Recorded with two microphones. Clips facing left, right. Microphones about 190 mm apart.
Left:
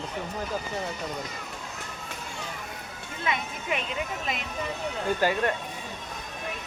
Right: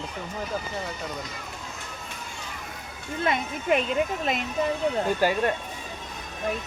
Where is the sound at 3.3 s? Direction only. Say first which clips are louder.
Right 6 dB; 50° right (ahead or behind).